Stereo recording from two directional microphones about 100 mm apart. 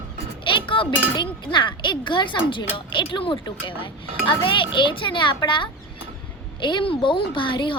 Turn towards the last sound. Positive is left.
turn(degrees=55)  # may be behind; listen again after turning